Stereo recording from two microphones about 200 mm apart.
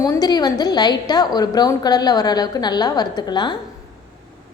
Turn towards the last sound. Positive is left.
turn(degrees=20)  # may be behind; listen again after turning